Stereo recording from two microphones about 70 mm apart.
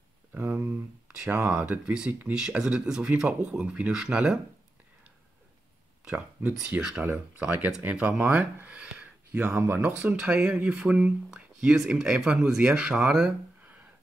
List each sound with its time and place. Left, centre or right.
0.7 s speech: centre
6.0 s speech: centre
7.0 s speech: right
10.1 s speech: centre